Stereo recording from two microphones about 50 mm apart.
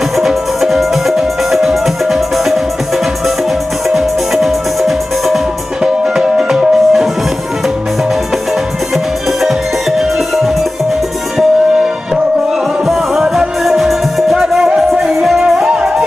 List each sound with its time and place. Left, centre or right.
0.1 s music: centre
3.9 s music: centre
8.9 s music: centre
12.8 s music: centre